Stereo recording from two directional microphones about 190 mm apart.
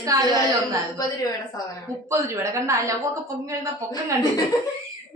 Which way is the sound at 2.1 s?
15° right (ahead or behind).